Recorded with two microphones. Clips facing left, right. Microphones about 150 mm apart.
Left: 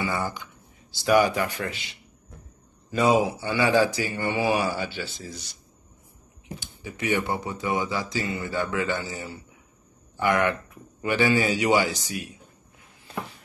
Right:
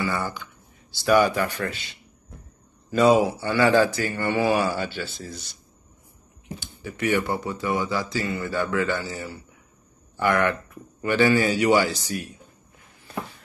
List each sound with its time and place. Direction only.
0.0 s speech: 15° left (ahead or behind)
3.1 s speech: 15° left (ahead or behind)
6.6 s speech: 15° left (ahead or behind)